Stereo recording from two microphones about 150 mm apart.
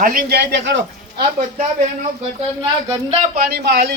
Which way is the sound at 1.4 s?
55° right (ahead or behind).